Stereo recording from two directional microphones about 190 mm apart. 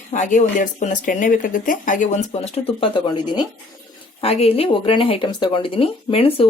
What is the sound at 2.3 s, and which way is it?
Speech, 30° left (ahead or behind).